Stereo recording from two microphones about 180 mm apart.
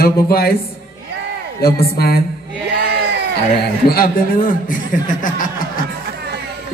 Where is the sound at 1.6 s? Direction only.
60° left (ahead or behind).